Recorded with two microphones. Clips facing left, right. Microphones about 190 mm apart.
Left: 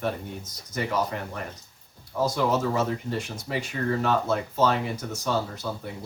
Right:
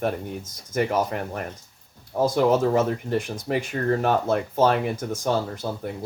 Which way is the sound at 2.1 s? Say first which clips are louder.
Right 5 dB; 50° right (ahead or behind).